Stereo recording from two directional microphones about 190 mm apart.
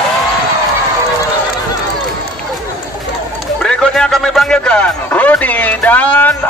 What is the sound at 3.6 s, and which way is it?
Speech, 5° left (ahead or behind).